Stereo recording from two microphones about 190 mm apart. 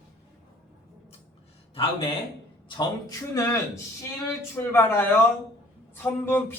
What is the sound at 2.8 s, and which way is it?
A man's voice, 20° left (ahead or behind).